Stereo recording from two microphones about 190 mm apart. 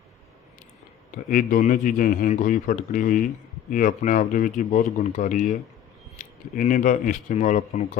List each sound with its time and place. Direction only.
1.1 s speech: 45° left (ahead or behind)